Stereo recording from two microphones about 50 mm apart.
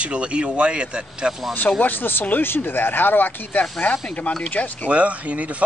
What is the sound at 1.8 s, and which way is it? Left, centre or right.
Speech, left.